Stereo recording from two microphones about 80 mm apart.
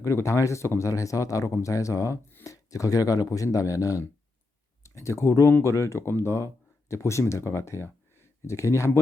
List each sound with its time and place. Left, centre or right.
0.0 s speech: left